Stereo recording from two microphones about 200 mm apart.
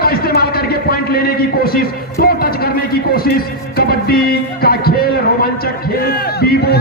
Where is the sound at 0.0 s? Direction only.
50° left (ahead or behind).